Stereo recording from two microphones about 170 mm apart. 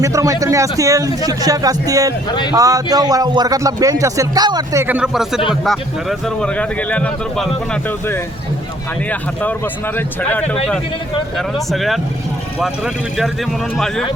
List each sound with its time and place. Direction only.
0.0 s speech: 20° right (ahead or behind); by 14.0 s 5° left (ahead or behind)